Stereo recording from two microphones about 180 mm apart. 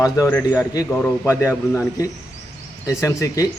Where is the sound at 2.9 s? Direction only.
15° left (ahead or behind).